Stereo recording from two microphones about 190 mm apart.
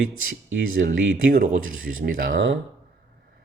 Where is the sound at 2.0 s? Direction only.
85° right.